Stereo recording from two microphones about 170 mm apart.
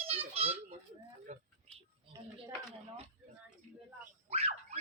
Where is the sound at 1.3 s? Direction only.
45° right (ahead or behind).